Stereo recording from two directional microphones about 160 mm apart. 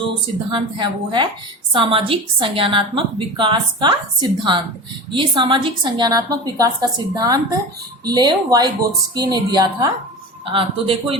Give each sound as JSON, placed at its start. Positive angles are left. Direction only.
{"t": 0.5, "sound": "a woman's voice", "side_deg": -30}